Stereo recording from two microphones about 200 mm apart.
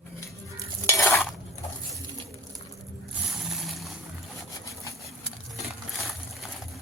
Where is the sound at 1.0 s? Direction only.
Centre (ahead or behind).